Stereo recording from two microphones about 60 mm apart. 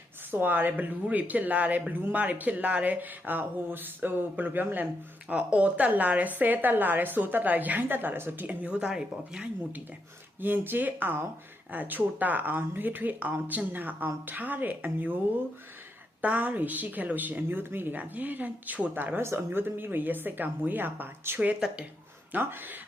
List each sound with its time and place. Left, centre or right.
0.3 s a woman's voice: right
5.3 s a woman's voice: right
8.4 s speech: centre
10.4 s a woman's voice: right
16.2 s a woman's voice: right
19.2 s speech: right